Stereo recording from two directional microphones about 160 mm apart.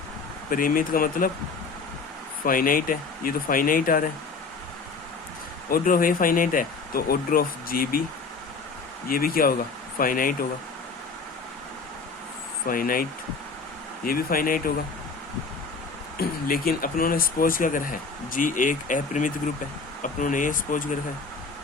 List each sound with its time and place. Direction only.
0.5 s speech: 60° left (ahead or behind)
2.4 s speech: 60° left (ahead or behind)
5.6 s speech: 60° left (ahead or behind)
9.0 s speech: 65° left (ahead or behind)
12.6 s speech: 60° left (ahead or behind)
16.1 s speech: 65° left (ahead or behind)